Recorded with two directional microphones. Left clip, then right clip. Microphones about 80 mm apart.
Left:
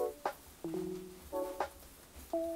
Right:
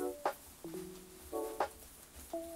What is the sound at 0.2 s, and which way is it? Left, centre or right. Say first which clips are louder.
Music: right 2 dB; centre.